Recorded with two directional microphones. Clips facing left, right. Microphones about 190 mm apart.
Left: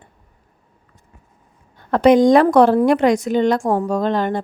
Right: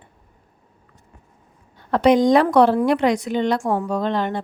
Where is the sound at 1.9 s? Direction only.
50° left (ahead or behind).